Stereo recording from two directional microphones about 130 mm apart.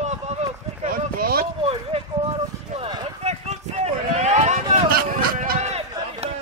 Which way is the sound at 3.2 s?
55° right (ahead or behind).